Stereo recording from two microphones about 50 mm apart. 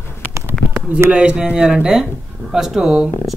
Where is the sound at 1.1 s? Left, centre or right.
Centre.